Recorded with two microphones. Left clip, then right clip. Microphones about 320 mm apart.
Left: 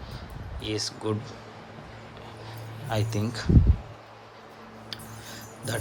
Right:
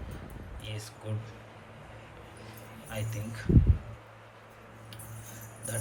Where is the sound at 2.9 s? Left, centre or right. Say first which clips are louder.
Left 10 dB; centre.